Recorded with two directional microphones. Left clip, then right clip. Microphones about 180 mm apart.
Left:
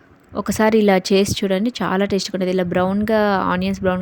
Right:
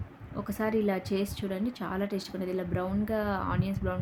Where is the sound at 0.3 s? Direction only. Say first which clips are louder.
Left 14 dB; 55° left (ahead or behind).